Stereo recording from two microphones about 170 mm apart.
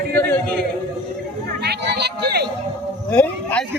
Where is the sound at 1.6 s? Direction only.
80° right.